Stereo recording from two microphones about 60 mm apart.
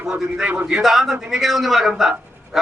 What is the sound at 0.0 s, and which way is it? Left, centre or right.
A man's voice, centre.